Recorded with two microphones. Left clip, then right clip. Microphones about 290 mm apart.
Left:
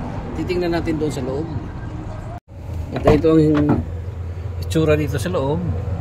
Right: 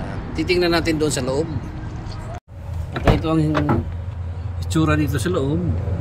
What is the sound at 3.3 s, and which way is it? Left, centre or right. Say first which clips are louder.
Speech: left 6 dB; right.